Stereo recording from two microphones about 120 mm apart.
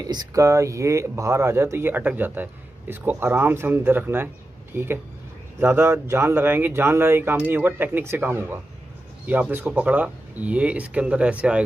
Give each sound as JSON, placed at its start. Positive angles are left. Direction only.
{"t": 0.0, "sound": "speech", "side_deg": -35}